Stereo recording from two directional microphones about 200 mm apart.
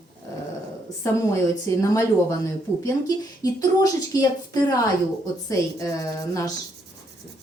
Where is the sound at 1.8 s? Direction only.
15° left (ahead or behind).